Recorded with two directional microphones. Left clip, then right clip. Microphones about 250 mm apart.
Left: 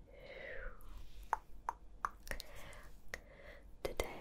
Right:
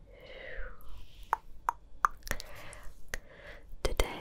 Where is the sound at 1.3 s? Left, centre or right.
Centre.